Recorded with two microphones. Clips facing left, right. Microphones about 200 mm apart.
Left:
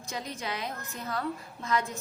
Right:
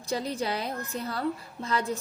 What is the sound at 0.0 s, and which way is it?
A woman's voice, 35° right (ahead or behind).